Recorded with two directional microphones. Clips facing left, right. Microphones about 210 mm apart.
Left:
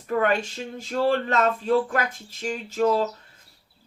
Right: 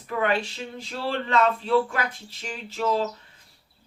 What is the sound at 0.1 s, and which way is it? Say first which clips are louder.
Speech: left 2 dB; 45° left (ahead or behind).